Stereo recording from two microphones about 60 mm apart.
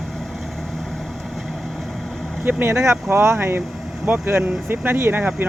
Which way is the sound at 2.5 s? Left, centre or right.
Right.